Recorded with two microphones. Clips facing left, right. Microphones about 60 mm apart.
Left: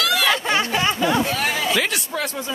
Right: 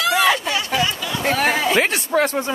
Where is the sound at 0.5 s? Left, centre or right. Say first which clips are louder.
Left 1 dB; left.